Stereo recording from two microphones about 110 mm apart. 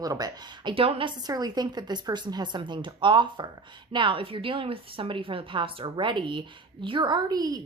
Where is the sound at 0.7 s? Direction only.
60° right (ahead or behind).